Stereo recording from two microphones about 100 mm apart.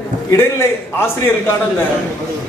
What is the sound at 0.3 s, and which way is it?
A man's voice, 25° left (ahead or behind).